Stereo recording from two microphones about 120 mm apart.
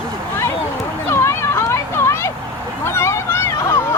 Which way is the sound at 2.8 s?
20° left (ahead or behind).